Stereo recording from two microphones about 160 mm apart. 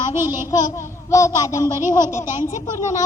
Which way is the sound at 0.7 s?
20° left (ahead or behind).